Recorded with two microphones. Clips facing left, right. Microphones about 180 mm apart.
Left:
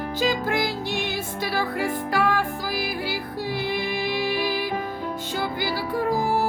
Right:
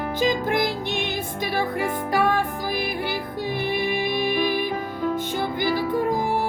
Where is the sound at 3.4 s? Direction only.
20° right (ahead or behind).